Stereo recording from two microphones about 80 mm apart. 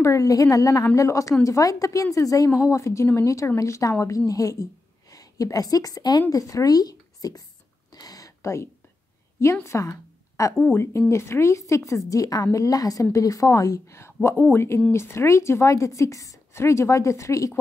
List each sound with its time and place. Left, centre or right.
0.0 s a woman's voice: left
7.9 s a sound: left
9.4 s a woman's voice: left